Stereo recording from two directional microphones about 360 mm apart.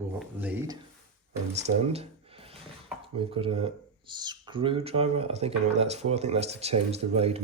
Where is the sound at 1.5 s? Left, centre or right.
Centre.